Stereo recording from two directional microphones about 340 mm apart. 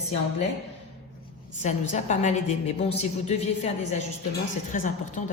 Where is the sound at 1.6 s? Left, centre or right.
Left.